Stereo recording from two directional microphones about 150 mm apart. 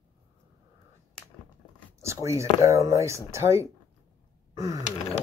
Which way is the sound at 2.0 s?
20° right (ahead or behind).